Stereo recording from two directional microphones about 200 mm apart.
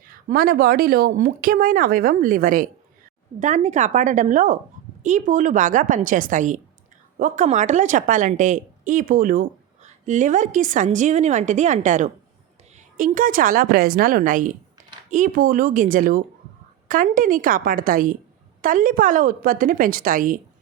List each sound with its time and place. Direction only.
0.3 s a woman's voice: 50° right (ahead or behind)